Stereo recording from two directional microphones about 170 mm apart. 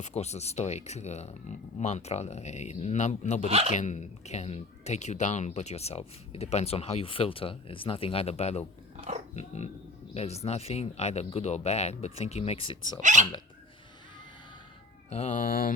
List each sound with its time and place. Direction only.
0.0 s speech: 40° left (ahead or behind)
13.0 s speech: 45° right (ahead or behind)
15.1 s speech: 40° left (ahead or behind); by 15.7 s 60° left (ahead or behind)